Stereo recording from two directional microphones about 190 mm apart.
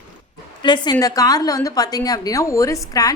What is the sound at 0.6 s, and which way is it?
A woman's voice, 25° left (ahead or behind).